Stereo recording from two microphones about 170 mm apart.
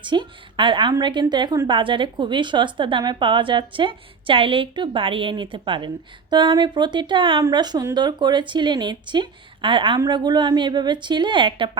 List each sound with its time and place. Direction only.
0.0 s a woman's voice: 30° right (ahead or behind)